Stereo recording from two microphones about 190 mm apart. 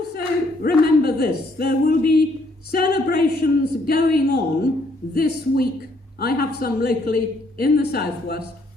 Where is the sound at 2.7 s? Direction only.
55° left (ahead or behind).